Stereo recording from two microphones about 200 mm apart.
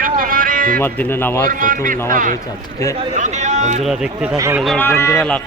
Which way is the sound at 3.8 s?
5° right (ahead or behind).